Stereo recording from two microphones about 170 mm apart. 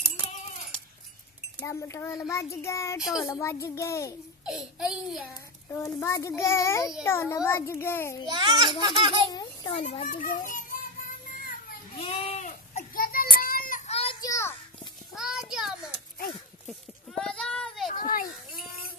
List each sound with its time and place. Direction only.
1.6 s a child's voice: 15° left (ahead or behind)
3.0 s a child's voice: 5° right (ahead or behind)
3.3 s a child's voice: 15° left (ahead or behind)
4.5 s a child's voice: centre (ahead or behind)
5.7 s a child's voice: 15° left (ahead or behind)
8.3 s speech: 30° right (ahead or behind)
9.3 s a child's voice: 25° left (ahead or behind)
9.8 s a child's voice: 40° left (ahead or behind)
10.2 s child singing: 50° left (ahead or behind)
12.0 s baby cry: 30° left (ahead or behind)
14.2 s children playing: 15° left (ahead or behind)
15.1 s a sound: centre (ahead or behind)
17.3 s child singing: 5° left (ahead or behind)
17.9 s children playing: 55° left (ahead or behind)